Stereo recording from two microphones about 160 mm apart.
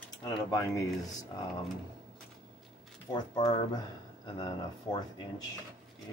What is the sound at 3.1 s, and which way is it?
Speech, 25° left (ahead or behind).